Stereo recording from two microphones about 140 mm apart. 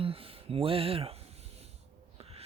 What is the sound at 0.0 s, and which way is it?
Speech, 40° right (ahead or behind).